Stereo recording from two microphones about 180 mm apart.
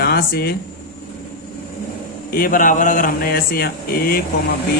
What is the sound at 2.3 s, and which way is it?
Speech, 50° left (ahead or behind).